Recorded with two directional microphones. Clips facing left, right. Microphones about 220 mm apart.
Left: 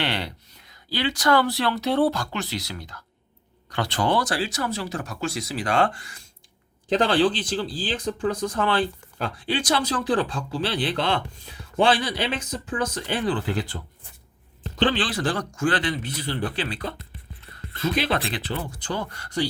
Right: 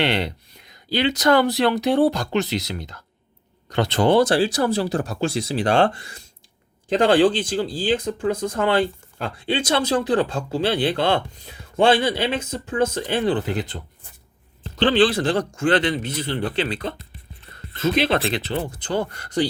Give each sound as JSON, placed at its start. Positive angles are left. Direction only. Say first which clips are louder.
{"t": 0.0, "sound": "speech", "louder": "right 6 dB", "side_deg": -20}
{"t": 14.9, "sound": "speech", "louder": "right 8 dB", "side_deg": -25}